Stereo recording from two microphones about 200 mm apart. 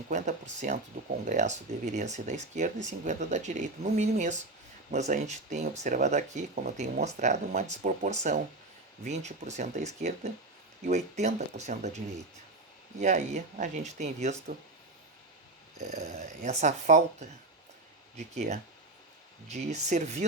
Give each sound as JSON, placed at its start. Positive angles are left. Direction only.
{"t": 0.1, "sound": "speech", "side_deg": -35}
{"t": 15.8, "sound": "speech", "side_deg": -35}
{"t": 18.3, "sound": "speech", "side_deg": -35}